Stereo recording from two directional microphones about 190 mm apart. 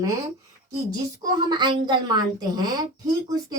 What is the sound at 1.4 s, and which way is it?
A woman's voice, 25° right (ahead or behind).